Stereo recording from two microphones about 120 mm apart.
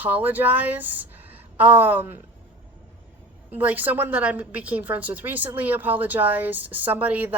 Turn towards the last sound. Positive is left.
turn(degrees=-15)  # may be behind; listen again after turning